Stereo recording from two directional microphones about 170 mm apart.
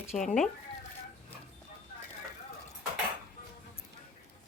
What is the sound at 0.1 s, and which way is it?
Speech, 45° left (ahead or behind).